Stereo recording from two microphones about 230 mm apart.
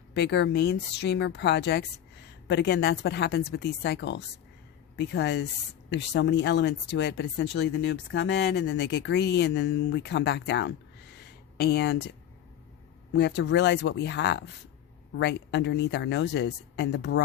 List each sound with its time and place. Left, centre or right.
0.1 s speech: left
11.2 s a sound: left
13.1 s speech: left